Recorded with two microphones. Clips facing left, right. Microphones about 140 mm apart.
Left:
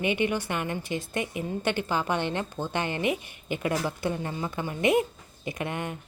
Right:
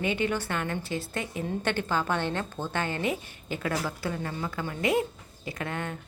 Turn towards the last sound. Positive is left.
turn(degrees=15)  # may be behind; listen again after turning